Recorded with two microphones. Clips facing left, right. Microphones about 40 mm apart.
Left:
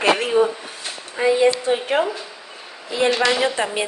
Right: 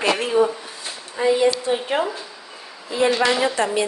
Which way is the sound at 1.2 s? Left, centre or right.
Left.